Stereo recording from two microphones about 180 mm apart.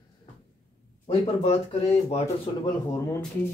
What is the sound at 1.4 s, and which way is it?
Speech, 35° left (ahead or behind).